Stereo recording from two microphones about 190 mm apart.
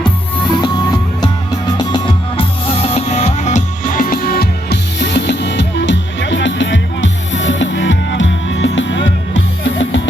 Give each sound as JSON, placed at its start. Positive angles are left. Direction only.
{"t": 0.6, "sound": "music", "side_deg": 20}